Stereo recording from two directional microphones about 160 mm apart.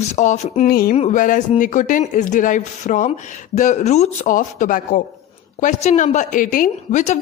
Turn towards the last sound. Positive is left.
turn(degrees=50)  # may be behind; listen again after turning